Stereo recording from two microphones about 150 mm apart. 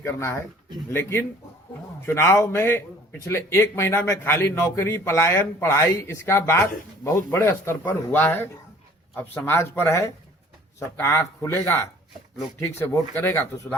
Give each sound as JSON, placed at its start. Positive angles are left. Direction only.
{"t": 0.0, "sound": "a man's voice", "side_deg": 15}
{"t": 2.0, "sound": "a man's voice", "side_deg": 15}